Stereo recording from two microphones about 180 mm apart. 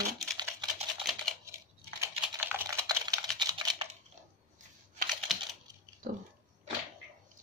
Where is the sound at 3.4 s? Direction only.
25° right (ahead or behind).